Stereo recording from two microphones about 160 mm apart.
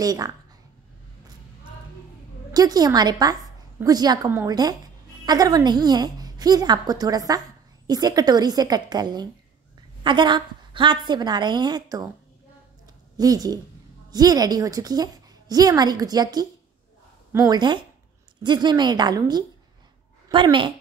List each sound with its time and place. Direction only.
0.0 s a woman's voice: 25° right (ahead or behind)
2.5 s a woman's voice: 25° right (ahead or behind)
13.2 s a woman's voice: 25° right (ahead or behind)